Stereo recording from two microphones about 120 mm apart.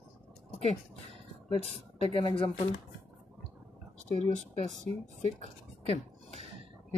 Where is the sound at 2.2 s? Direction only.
50° left (ahead or behind).